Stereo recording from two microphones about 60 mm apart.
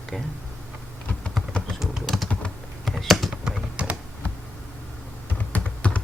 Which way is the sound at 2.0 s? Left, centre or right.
Centre.